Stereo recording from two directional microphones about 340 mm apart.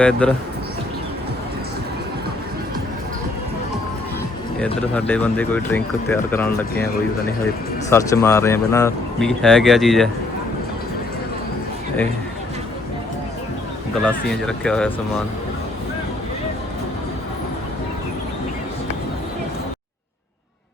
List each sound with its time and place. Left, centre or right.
0.0 s speech: centre
4.6 s speech: centre
7.9 s speech: centre
14.0 s speech: centre